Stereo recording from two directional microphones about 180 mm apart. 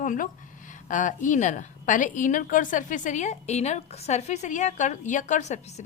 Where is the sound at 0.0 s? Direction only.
45° left (ahead or behind).